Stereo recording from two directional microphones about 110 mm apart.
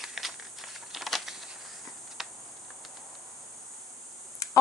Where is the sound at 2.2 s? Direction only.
Centre (ahead or behind).